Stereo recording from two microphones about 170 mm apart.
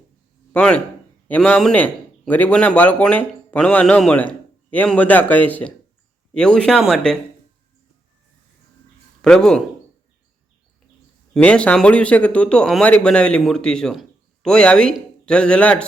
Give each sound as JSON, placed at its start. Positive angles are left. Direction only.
{"t": 0.5, "sound": "a man's voice", "side_deg": 5}
{"t": 9.2, "sound": "speech", "side_deg": 5}
{"t": 11.3, "sound": "speech", "side_deg": 5}